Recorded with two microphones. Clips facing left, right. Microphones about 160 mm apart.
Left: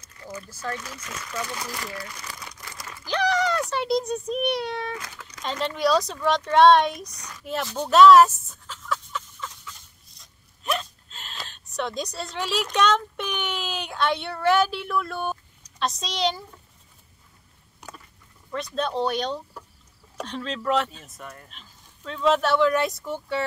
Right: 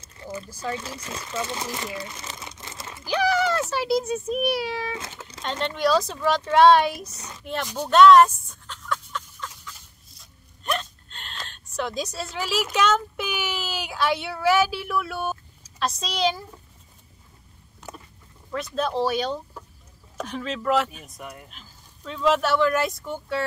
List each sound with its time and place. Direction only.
0.0 s a sound: 25° right (ahead or behind)
0.5 s speech: 15° right (ahead or behind)
0.7 s speech: 30° right (ahead or behind)
3.1 s a sound: 5° right (ahead or behind)
3.7 s speech: 5° right (ahead or behind)
4.9 s speech: 25° right (ahead or behind)
5.4 s speech: centre (ahead or behind)
7.1 s a woman's voice: 25° right (ahead or behind)
7.6 s speech: 10° right (ahead or behind)
7.9 s a sound: centre (ahead or behind)
17.8 s boat: 15° left (ahead or behind)
18.5 s speech: centre (ahead or behind)